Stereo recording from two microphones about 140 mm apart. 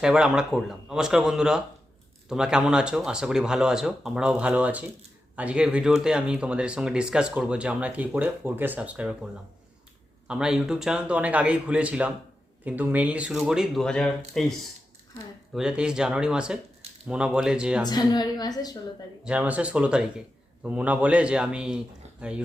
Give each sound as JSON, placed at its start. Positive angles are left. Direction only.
{"t": 0.0, "sound": "speech", "side_deg": -5}
{"t": 15.5, "sound": "speech", "side_deg": -5}
{"t": 17.8, "sound": "a woman's voice", "side_deg": 30}
{"t": 19.2, "sound": "speech", "side_deg": -10}